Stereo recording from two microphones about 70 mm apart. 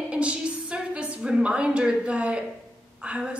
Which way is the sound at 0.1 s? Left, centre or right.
Centre.